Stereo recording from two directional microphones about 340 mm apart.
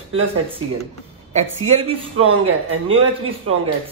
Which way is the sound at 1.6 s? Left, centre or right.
Centre.